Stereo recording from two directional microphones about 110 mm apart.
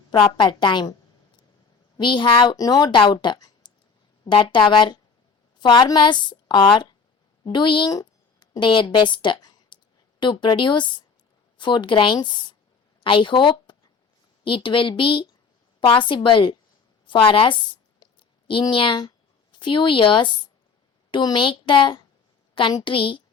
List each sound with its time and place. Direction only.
0.1 s speech: 50° left (ahead or behind)
2.0 s a woman's voice: 45° left (ahead or behind)
7.9 s a sound: 45° left (ahead or behind)
10.2 s speech: 45° left (ahead or behind)
17.1 s a sound: 50° left (ahead or behind)
18.6 s speech: 50° left (ahead or behind)